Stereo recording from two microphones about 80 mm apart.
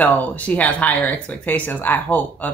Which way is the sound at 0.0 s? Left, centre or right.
Left.